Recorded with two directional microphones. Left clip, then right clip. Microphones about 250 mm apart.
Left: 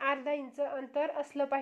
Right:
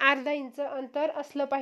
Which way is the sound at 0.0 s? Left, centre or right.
Right.